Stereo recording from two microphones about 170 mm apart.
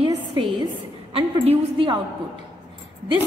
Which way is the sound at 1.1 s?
30° right (ahead or behind).